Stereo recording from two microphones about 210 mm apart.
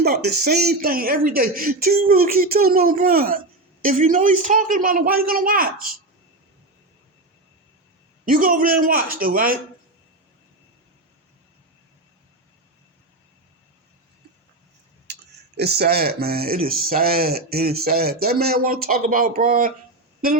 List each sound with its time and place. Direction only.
0.0 s speech: 50° right (ahead or behind)
8.2 s a man's voice: 40° right (ahead or behind)
15.5 s speech: 50° right (ahead or behind)